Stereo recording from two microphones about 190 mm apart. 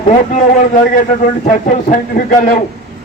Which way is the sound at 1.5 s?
40° left (ahead or behind).